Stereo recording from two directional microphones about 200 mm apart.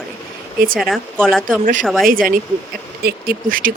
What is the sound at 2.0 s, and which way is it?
Speech, 45° right (ahead or behind).